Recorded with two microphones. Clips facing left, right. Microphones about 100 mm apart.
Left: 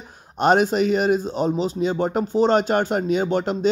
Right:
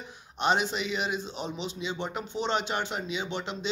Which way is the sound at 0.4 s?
45° left (ahead or behind).